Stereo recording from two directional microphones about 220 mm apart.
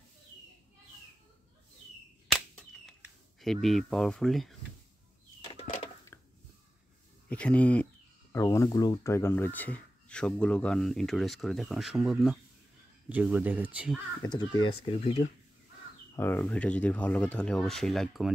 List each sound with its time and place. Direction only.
2.2 s cap gun: centre (ahead or behind)
5.5 s a sound: 25° left (ahead or behind)
6.1 s a sound: 10° left (ahead or behind)
7.2 s speech: 5° left (ahead or behind)
14.2 s speech: 20° left (ahead or behind)
16.2 s speech: 10° left (ahead or behind)